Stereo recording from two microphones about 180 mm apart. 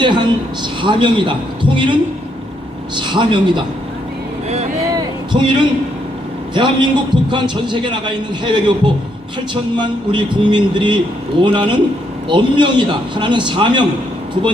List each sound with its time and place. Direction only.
0.0 s a sound: 25° right (ahead or behind)
0.8 s a man's voice: 25° right (ahead or behind)
4.4 s vehicle: 35° right (ahead or behind)
4.9 s a sound: 25° right (ahead or behind)
6.5 s a man's voice: 25° right (ahead or behind)
9.7 s a man's voice: 25° right (ahead or behind)